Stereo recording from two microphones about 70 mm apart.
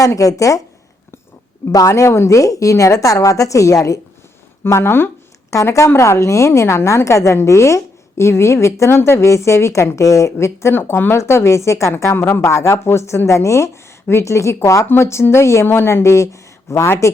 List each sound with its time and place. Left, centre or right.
0.0 s speech: left
1.9 s speech: left
4.6 s speech: left
5.5 s speech: left